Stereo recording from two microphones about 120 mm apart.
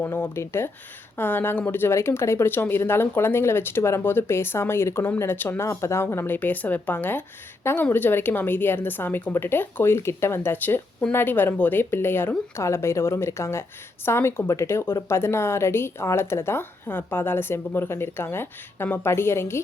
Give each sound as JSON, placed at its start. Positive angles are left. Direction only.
{"t": 0.0, "sound": "a woman's voice", "side_deg": 20}